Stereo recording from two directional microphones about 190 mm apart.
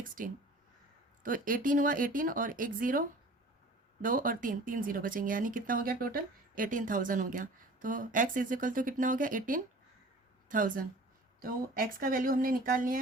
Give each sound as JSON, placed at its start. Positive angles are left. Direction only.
{"t": 0.2, "sound": "speech", "side_deg": -45}
{"t": 4.0, "sound": "speech", "side_deg": -45}